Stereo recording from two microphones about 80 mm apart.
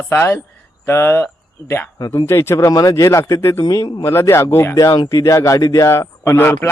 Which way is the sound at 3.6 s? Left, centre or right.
Left.